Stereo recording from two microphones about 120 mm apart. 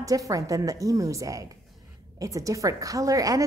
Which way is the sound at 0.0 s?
30° right (ahead or behind).